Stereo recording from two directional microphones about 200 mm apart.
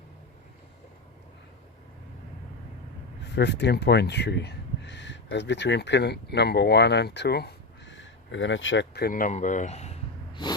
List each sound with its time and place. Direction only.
3.3 s speech: 60° left (ahead or behind); by 10.5 s 30° left (ahead or behind)